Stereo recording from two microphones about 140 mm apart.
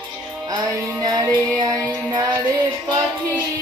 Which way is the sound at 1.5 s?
35° right (ahead or behind).